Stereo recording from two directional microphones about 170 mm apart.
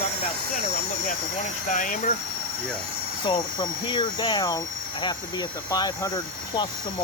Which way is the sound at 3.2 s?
25° left (ahead or behind).